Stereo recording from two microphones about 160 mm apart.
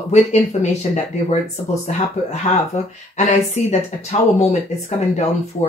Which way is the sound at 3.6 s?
45° left (ahead or behind).